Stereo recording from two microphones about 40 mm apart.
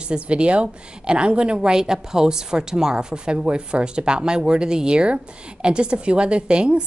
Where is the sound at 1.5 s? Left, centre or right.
Centre.